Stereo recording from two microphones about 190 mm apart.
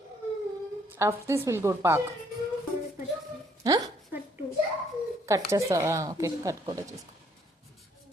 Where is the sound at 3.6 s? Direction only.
20° right (ahead or behind).